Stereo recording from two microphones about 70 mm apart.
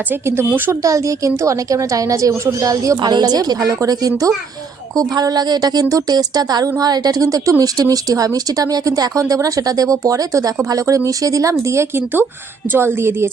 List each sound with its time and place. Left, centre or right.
0.1 s speech: right
0.8 s a woman's voice: right
3.0 s speech: right
3.7 s a woman's voice: right
11.6 s speech: right